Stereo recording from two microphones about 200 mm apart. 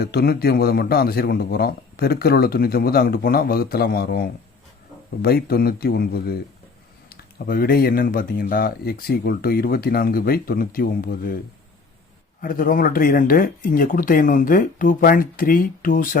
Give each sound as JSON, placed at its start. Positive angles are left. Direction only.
{"t": 0.0, "sound": "a man's voice", "side_deg": 50}
{"t": 12.4, "sound": "a man's voice", "side_deg": 45}